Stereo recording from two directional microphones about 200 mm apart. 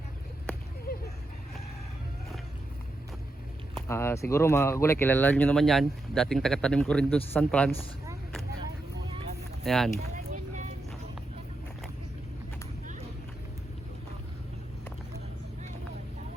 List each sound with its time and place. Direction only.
0.9 s vehicle: 45° left (ahead or behind)
3.8 s speech: 15° left (ahead or behind)
9.6 s speech: centre (ahead or behind)
10.0 s a sound: 35° right (ahead or behind)